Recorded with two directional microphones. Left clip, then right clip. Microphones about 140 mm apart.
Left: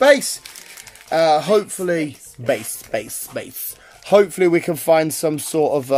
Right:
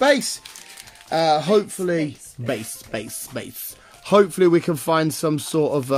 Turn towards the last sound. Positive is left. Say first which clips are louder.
# left 3 dB
turn(degrees=-15)  # may be behind; listen again after turning